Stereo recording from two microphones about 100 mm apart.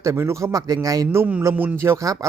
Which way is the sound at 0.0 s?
30° right (ahead or behind).